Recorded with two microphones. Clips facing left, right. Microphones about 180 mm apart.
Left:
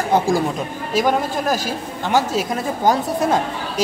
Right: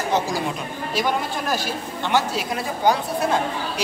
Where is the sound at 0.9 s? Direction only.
40° left (ahead or behind).